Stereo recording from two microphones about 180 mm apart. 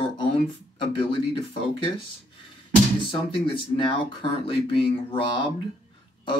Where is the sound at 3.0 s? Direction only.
30° left (ahead or behind).